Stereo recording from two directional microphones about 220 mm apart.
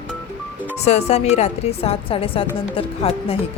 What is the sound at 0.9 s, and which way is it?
A woman's voice, 30° left (ahead or behind).